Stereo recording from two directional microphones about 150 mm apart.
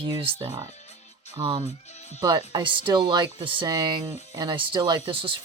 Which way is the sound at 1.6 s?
45° left (ahead or behind).